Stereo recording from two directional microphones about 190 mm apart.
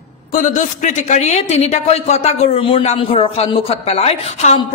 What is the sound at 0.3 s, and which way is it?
Speech, 40° left (ahead or behind).